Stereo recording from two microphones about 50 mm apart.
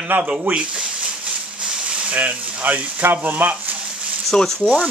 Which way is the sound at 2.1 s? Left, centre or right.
Right.